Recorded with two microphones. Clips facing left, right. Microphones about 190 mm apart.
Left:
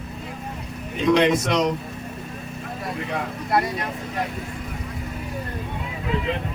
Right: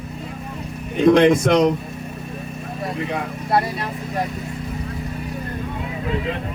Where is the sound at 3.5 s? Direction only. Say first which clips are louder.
Right 2 dB; 30° right (ahead or behind).